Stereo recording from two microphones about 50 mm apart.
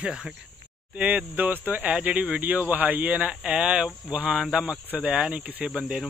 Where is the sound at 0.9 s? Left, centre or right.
Right.